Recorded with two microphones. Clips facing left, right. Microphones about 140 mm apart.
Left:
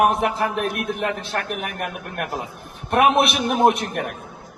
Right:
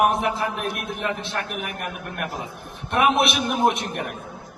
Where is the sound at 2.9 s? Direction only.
40° left (ahead or behind).